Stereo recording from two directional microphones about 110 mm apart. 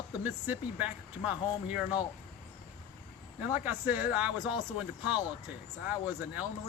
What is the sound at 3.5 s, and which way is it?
Speech, 15° right (ahead or behind).